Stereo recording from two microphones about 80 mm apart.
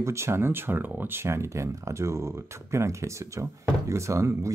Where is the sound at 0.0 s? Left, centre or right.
Right.